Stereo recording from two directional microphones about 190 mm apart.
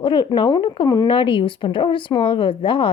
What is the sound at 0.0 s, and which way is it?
Speech, 25° left (ahead or behind).